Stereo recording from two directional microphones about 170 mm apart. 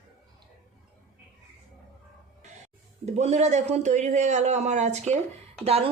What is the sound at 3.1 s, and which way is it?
A man's voice, 40° right (ahead or behind).